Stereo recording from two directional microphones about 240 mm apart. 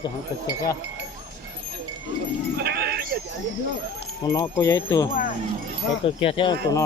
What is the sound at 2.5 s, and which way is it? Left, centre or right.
Sheep, right.